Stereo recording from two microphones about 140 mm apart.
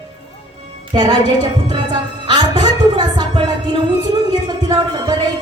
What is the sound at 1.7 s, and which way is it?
Music, 30° right (ahead or behind).